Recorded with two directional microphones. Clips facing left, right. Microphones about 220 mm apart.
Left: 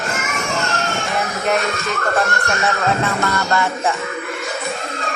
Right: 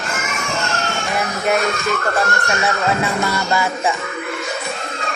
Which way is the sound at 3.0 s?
15° right (ahead or behind).